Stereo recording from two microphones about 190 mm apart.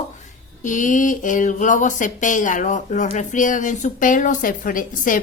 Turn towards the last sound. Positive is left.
turn(degrees=45)  # may be behind; listen again after turning